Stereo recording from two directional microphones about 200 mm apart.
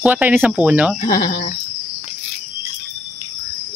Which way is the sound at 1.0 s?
45° left (ahead or behind).